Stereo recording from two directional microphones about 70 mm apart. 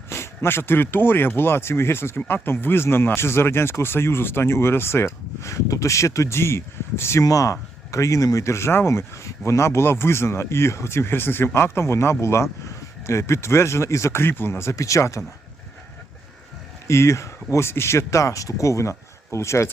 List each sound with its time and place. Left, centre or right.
0.1 s speech: left
7.3 s speech: left
16.8 s speech: left